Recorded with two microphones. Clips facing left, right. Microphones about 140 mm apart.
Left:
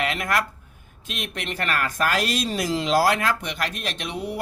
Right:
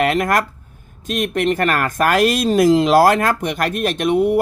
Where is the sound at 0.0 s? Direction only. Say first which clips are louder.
Right 8 dB; 50° right (ahead or behind).